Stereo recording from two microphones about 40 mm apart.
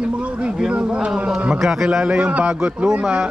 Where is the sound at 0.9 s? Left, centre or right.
Right.